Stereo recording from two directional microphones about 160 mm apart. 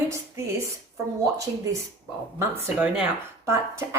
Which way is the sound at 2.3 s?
15° right (ahead or behind).